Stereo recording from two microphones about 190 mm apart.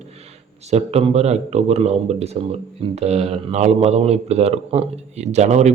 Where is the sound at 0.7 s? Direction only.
35° right (ahead or behind).